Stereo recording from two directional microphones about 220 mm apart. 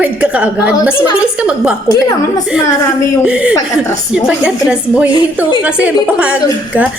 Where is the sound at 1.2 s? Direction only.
5° right (ahead or behind).